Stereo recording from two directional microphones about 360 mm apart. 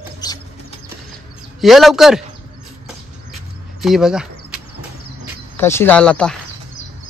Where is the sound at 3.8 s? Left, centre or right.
Centre.